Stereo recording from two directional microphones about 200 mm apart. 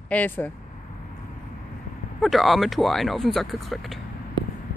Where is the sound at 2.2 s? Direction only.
Centre (ahead or behind).